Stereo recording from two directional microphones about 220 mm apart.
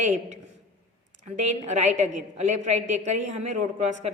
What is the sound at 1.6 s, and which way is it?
A woman's voice, 30° right (ahead or behind).